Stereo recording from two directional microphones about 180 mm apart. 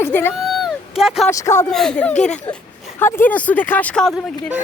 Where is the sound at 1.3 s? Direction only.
15° left (ahead or behind).